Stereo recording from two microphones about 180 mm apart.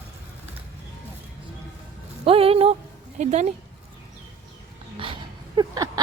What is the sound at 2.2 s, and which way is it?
Music, 30° right (ahead or behind).